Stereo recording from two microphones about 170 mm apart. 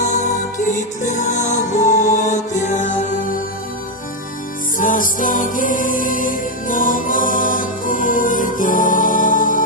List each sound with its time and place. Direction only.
0.0 s music: 45° left (ahead or behind)
4.7 s music: 50° left (ahead or behind)